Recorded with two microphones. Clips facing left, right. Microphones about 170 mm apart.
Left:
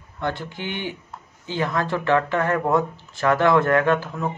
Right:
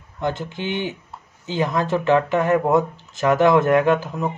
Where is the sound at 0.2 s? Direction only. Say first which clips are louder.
Right 3 dB; 20° right (ahead or behind).